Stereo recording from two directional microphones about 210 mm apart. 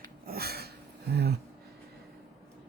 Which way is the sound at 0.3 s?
45° right (ahead or behind).